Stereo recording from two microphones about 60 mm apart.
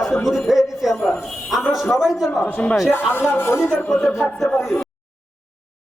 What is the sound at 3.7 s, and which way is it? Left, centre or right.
Speech, centre.